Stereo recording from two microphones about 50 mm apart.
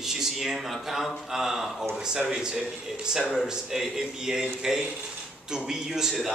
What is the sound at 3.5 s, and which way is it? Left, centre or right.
A man's voice, centre.